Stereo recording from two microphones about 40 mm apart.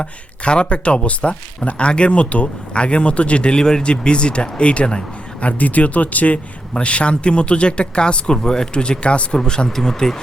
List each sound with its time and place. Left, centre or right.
0.0 s speech: left
5.4 s speech: left; by 10.2 s centre